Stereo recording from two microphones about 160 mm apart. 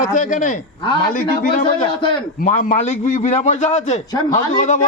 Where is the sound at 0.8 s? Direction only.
30° left (ahead or behind).